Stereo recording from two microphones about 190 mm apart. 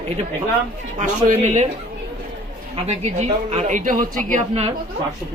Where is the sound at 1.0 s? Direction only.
40° right (ahead or behind).